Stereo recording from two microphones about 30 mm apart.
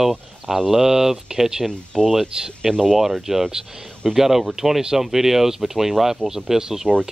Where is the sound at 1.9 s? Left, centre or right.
Centre.